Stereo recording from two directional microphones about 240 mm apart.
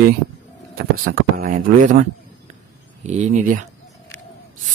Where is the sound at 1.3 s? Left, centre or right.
Right.